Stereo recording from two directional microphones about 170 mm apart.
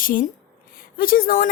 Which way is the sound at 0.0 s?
55° left (ahead or behind).